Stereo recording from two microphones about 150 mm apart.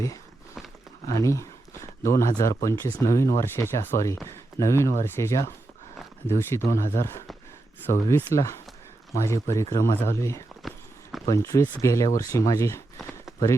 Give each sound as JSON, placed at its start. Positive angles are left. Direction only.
{"t": 1.0, "sound": "speech", "side_deg": 20}
{"t": 10.6, "sound": "clip-clop", "side_deg": 0}
{"t": 11.3, "sound": "speech", "side_deg": 20}